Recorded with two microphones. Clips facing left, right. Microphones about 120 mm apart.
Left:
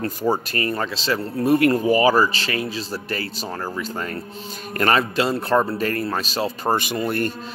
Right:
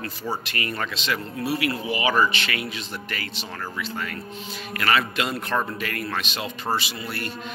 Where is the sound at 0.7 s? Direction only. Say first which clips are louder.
Left 3 dB; 30° left (ahead or behind).